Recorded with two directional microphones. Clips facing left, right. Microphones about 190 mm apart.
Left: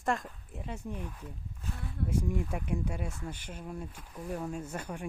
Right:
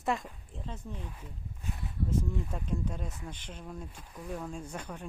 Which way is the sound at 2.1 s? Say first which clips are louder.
Left 2 dB; 15° left (ahead or behind).